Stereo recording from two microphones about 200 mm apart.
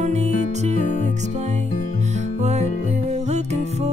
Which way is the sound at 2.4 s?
35° right (ahead or behind).